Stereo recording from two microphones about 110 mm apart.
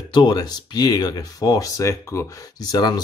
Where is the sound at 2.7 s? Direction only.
40° left (ahead or behind).